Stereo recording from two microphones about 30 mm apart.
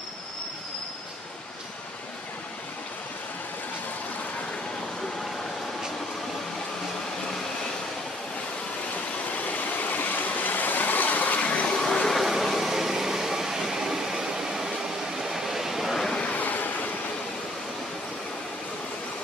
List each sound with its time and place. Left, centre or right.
9.3 s stream: left
11.8 s a sound: left
12.1 s vehicle: centre
16.3 s train: left